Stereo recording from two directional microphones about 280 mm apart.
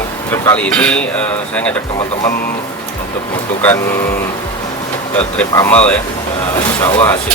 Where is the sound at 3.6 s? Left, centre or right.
Centre.